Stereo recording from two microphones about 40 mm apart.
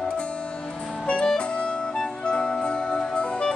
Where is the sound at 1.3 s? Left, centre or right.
Left.